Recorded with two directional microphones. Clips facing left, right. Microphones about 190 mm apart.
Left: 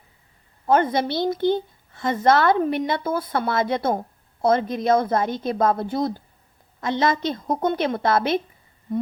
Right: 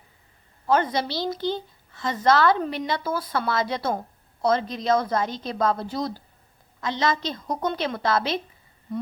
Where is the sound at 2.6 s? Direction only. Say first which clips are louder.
Left 5 dB; 50° left (ahead or behind).